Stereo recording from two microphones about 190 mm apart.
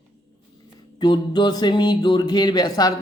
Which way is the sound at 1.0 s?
25° left (ahead or behind).